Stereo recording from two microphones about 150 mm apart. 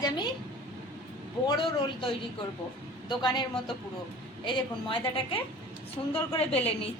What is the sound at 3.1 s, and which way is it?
Speech, 30° left (ahead or behind).